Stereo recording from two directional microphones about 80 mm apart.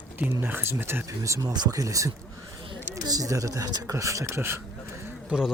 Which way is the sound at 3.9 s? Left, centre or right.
Right.